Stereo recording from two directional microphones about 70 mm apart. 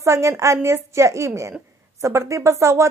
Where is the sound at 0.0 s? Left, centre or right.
Right.